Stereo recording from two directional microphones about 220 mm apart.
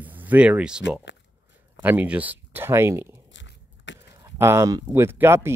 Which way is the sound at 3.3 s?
55° left (ahead or behind).